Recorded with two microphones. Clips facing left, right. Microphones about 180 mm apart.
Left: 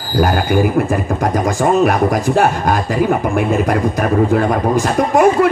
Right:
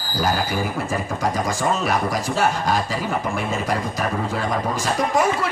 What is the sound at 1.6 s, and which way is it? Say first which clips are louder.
Speech: left 11 dB; 55° left (ahead or behind).